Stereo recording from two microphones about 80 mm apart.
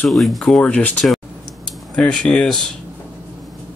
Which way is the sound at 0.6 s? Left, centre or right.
Centre.